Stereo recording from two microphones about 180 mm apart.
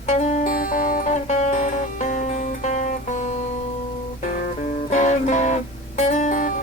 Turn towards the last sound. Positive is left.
turn(degrees=45)  # may be behind; listen again after turning